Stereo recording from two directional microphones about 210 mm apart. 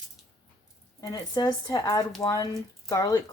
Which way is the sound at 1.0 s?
15° left (ahead or behind).